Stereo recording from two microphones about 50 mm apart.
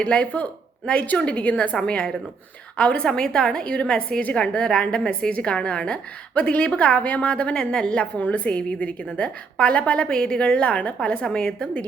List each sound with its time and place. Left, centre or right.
0.0 s a woman's voice: left
3.1 s a woman's voice: centre